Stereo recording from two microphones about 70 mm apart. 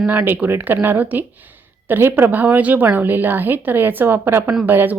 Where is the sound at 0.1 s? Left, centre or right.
Right.